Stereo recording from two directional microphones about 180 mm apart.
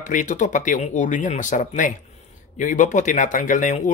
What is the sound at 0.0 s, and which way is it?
Speech, 45° left (ahead or behind).